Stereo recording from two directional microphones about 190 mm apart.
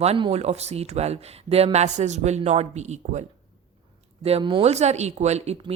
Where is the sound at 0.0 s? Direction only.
35° right (ahead or behind).